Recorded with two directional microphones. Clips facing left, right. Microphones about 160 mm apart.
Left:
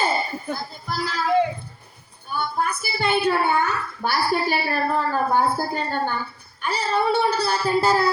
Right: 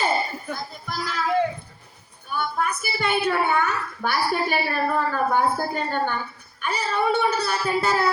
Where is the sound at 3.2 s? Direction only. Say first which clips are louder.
Left 1 dB; 30° left (ahead or behind).